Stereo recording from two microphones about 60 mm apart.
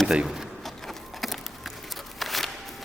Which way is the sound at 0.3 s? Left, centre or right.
Centre.